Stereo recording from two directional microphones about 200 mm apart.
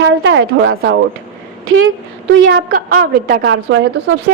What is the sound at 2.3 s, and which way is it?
Speech, 90° right.